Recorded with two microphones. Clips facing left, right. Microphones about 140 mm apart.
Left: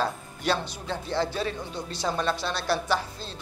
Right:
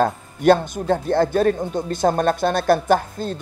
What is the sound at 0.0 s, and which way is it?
Speech, 50° right (ahead or behind).